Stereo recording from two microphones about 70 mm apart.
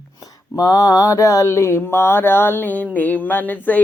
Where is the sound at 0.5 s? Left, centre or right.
Left.